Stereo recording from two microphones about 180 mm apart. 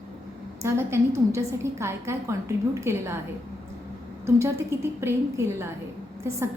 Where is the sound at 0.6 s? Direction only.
15° right (ahead or behind).